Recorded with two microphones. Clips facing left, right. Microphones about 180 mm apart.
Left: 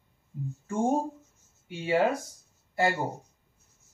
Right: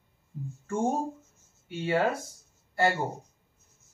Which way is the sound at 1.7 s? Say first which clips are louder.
Even; 15° left (ahead or behind).